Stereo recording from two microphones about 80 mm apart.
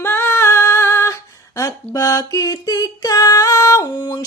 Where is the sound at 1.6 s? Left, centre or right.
Left.